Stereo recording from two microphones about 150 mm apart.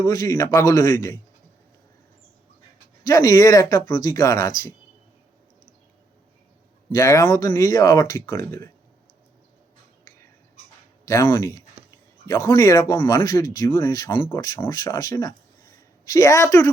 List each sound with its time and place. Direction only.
0.0 s speech: 20° left (ahead or behind)
3.1 s speech: 20° left (ahead or behind)
6.9 s speech: 20° left (ahead or behind)
11.0 s speech: 20° left (ahead or behind)
14.0 s speech: 30° left (ahead or behind)